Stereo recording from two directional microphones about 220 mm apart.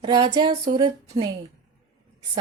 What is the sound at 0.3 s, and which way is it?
Speech, 20° right (ahead or behind).